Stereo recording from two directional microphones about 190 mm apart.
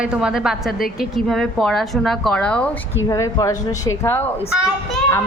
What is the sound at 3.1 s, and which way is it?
Speech, 15° left (ahead or behind).